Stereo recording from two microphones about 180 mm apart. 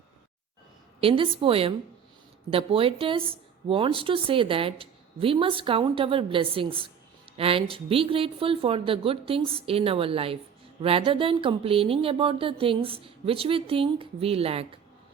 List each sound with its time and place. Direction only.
1.0 s a woman's voice: 30° right (ahead or behind)